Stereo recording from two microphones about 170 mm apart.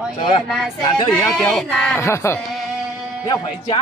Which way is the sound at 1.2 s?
Centre (ahead or behind).